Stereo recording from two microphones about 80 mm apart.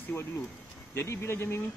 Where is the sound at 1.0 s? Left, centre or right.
Left.